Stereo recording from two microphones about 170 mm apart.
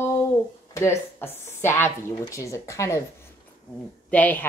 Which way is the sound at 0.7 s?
15° left (ahead or behind).